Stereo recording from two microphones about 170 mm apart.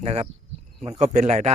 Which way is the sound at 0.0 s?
40° right (ahead or behind).